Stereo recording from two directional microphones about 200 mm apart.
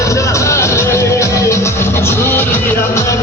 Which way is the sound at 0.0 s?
15° left (ahead or behind).